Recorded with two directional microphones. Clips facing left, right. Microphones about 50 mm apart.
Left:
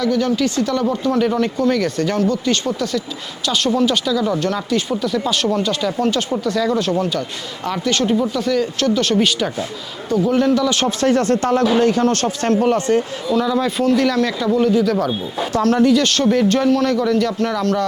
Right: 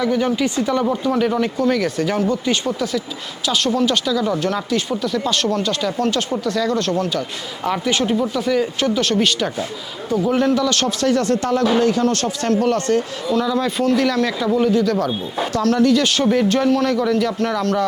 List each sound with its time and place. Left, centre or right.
0.0 s speech: centre
9.0 s speech: centre
10.8 s speech: left
12.6 s speech: left
13.2 s speech: centre
15.5 s speech: left
15.9 s speech: centre